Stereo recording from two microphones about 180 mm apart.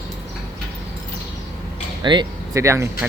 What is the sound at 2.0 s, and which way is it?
Speech, 25° right (ahead or behind).